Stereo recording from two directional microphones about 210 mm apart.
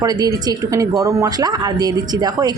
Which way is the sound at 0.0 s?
15° right (ahead or behind).